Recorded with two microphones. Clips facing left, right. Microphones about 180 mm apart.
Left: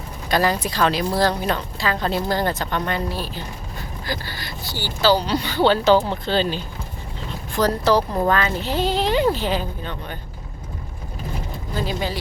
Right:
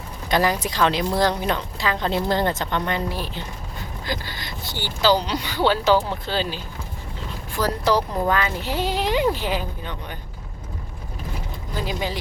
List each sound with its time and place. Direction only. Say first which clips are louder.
0.3 s a woman's voice: left 1 dB; 20° right (ahead or behind)
11.7 s speech: left 2 dB; 15° right (ahead or behind)